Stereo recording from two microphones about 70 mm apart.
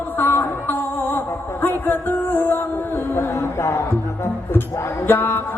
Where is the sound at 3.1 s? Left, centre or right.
Left.